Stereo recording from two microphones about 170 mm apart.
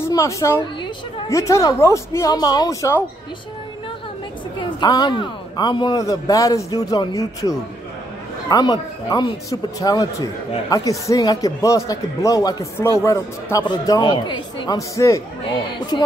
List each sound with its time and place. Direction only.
0.0 s a woman's voice: 15° left (ahead or behind)
4.6 s speech: 25° left (ahead or behind)